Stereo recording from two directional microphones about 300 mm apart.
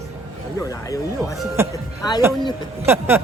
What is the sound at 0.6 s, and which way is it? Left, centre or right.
Speech, centre.